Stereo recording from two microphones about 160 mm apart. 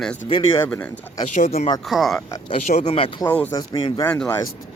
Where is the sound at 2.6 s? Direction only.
50° left (ahead or behind); by 3.3 s 35° left (ahead or behind).